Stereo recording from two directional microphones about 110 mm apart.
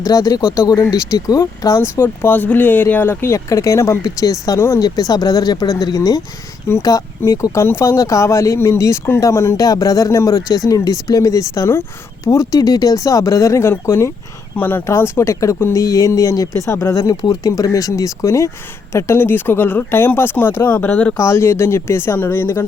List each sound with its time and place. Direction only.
0.0 s speech: 35° left (ahead or behind); by 21.2 s 15° left (ahead or behind)
21.2 s speech: 25° left (ahead or behind)